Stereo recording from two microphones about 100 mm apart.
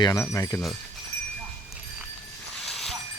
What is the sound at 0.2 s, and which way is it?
Speech, 30° left (ahead or behind).